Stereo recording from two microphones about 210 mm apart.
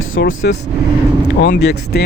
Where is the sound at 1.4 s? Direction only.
50° left (ahead or behind).